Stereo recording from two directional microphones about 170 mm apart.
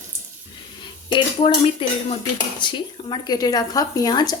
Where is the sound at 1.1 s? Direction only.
30° left (ahead or behind).